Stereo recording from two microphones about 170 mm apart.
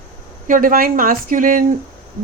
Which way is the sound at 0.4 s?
55° right (ahead or behind).